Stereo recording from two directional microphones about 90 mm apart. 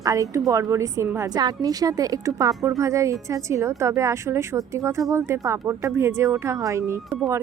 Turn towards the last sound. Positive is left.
turn(degrees=-35)  # may be behind; listen again after turning